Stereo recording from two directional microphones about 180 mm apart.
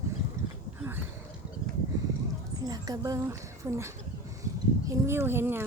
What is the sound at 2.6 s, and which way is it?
Speech, 20° right (ahead or behind).